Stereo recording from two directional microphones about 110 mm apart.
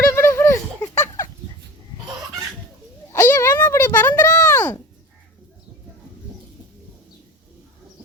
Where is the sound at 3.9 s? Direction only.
15° left (ahead or behind).